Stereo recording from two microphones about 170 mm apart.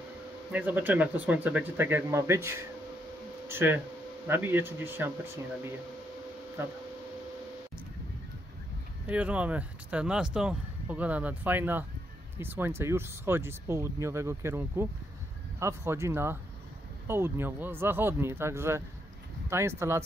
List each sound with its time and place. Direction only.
0.5 s speech: 10° right (ahead or behind)
9.0 s speech: 10° right (ahead or behind)